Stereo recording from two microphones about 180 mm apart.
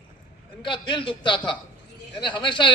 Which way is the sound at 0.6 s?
25° left (ahead or behind).